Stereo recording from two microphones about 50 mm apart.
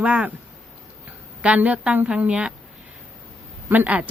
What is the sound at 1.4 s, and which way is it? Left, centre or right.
Speech, right.